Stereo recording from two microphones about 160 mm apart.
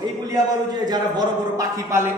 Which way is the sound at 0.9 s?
25° right (ahead or behind).